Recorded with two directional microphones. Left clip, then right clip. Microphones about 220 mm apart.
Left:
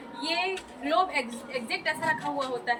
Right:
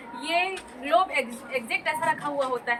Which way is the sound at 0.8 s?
15° left (ahead or behind).